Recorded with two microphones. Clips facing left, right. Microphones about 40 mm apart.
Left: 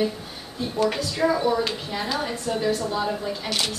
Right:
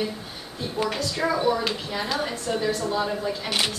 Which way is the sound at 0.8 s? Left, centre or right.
Centre.